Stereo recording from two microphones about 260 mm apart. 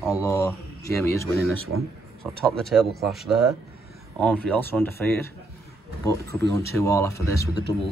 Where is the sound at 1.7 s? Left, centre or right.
Right.